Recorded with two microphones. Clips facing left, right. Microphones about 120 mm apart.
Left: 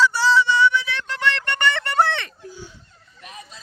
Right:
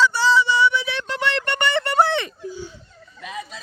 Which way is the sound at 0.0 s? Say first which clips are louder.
Even; 5° left (ahead or behind).